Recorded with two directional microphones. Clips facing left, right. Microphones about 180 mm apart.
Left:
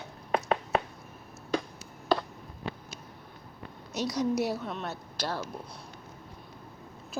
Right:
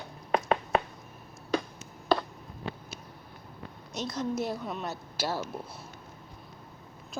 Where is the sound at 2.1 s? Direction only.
60° right (ahead or behind).